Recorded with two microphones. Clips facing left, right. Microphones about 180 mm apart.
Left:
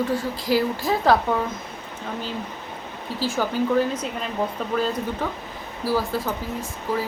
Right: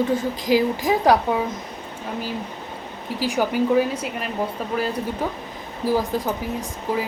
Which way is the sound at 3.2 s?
15° right (ahead or behind).